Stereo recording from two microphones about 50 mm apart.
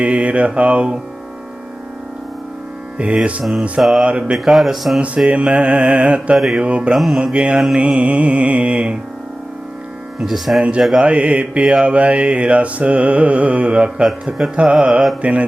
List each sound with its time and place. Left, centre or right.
0.0 s mantra: right
3.0 s mantra: right
3.8 s speech: centre
4.0 s mantra: centre
4.4 s speech: centre
4.9 s mantra: right
6.3 s mantra: centre
6.6 s mantra: right
6.9 s speech: centre
7.3 s mantra: right
10.2 s speech: centre
10.6 s mantra: right